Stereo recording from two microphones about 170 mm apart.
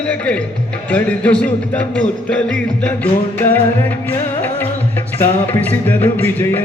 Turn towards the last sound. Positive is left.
turn(degrees=10)  # may be behind; listen again after turning